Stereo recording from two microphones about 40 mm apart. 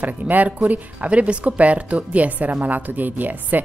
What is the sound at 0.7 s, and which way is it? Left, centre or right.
A woman's voice, right.